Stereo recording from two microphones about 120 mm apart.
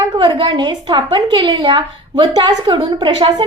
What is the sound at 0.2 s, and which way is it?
A woman's voice, 40° right (ahead or behind).